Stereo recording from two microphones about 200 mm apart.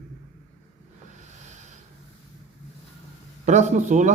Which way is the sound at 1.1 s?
35° right (ahead or behind).